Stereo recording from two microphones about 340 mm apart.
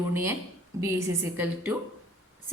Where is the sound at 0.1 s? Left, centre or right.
Centre.